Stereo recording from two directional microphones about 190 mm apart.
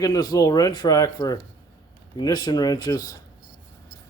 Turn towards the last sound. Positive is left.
turn(degrees=20)  # may be behind; listen again after turning